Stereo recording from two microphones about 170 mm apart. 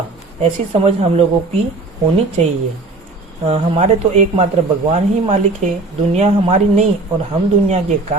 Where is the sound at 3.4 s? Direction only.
40° right (ahead or behind).